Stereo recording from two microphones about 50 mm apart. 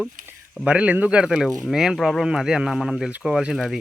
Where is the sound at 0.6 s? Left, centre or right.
Right.